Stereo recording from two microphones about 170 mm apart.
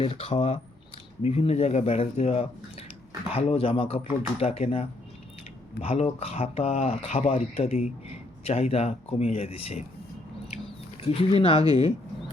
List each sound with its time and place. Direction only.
0.0 s speech: 35° left (ahead or behind)
11.0 s speech: 35° left (ahead or behind)